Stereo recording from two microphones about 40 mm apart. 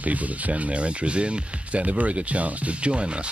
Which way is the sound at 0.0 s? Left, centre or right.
Right.